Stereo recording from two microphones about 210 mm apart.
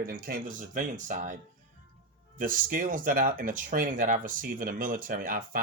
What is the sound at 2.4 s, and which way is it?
Speech, 40° right (ahead or behind).